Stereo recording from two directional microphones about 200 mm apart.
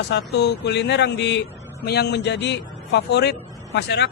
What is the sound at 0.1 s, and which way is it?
A man's voice, 55° left (ahead or behind).